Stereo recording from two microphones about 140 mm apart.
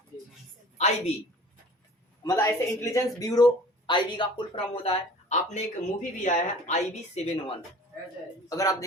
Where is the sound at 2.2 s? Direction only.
20° left (ahead or behind); by 7.5 s 50° left (ahead or behind).